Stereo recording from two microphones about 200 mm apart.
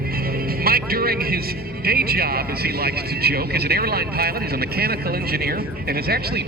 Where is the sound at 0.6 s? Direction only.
50° right (ahead or behind).